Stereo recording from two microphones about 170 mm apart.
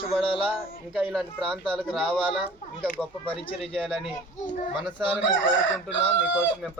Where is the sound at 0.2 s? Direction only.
30° left (ahead or behind).